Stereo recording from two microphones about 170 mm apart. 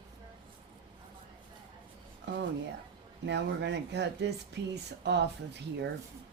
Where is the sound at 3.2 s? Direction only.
90° right.